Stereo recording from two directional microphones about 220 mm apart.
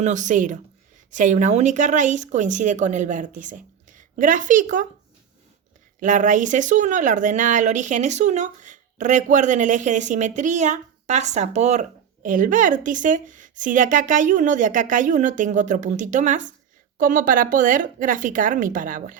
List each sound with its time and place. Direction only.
0.0 s speech: 35° right (ahead or behind)
6.0 s speech: 35° right (ahead or behind)